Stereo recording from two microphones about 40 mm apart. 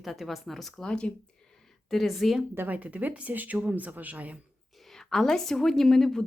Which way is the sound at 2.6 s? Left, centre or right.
Right.